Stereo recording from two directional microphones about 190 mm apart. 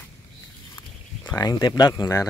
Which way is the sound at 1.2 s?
20° left (ahead or behind).